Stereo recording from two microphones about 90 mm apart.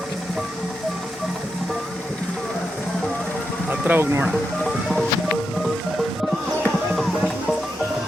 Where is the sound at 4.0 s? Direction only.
30° right (ahead or behind).